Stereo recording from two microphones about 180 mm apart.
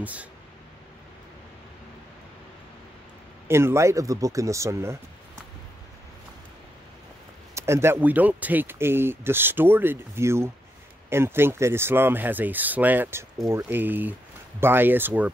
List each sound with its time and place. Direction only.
0.0 s speech: 10° right (ahead or behind)
3.4 s speech: 15° right (ahead or behind)
7.5 s speech: 15° right (ahead or behind)